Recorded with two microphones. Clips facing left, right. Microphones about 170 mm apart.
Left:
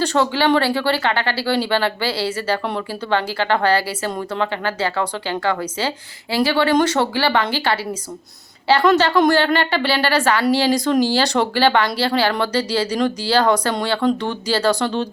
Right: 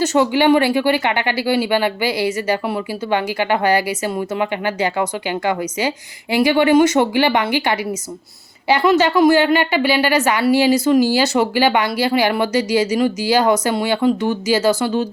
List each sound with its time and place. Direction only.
0.0 s speech: 10° right (ahead or behind)